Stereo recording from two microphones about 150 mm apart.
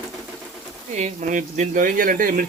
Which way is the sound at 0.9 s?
50° right (ahead or behind).